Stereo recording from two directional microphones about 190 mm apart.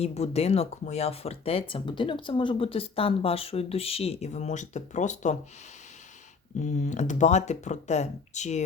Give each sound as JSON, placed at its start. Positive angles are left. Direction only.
{"t": 0.0, "sound": "speech", "side_deg": 35}
{"t": 6.7, "sound": "speech", "side_deg": 40}